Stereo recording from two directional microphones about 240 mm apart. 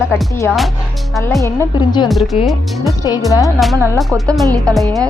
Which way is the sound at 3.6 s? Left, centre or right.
Centre.